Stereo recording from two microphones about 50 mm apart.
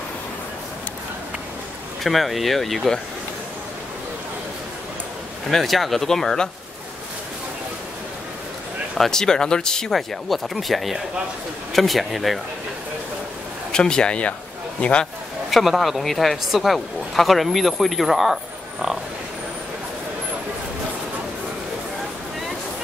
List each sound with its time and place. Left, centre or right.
2.0 s speech: centre
5.5 s speech: centre
8.9 s speech: centre
13.7 s speech: centre
15.5 s speech: centre